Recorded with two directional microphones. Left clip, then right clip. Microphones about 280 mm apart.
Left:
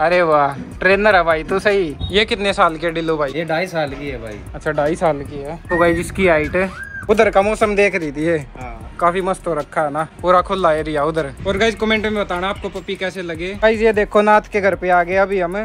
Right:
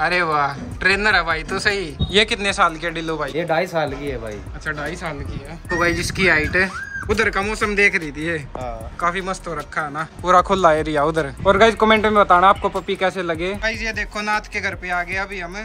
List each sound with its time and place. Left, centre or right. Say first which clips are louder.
0.0 s speech: left 5 dB; centre
3.3 s speech: even; right
4.6 s speech: left 10 dB; centre
10.3 s speech: right 1 dB; centre
11.1 s speech: right 4 dB; centre